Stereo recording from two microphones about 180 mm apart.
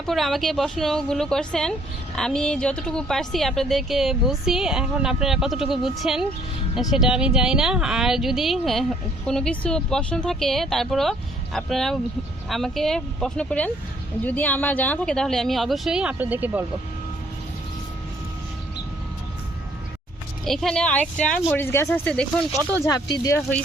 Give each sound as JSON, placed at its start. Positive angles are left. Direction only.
{"t": 0.0, "sound": "speech", "side_deg": 0}
{"t": 20.4, "sound": "speech", "side_deg": 0}
{"t": 22.8, "sound": "speech", "side_deg": 20}
{"t": 23.4, "sound": "speech", "side_deg": 5}